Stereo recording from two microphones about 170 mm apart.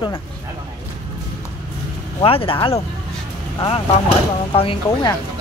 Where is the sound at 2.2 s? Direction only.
30° left (ahead or behind).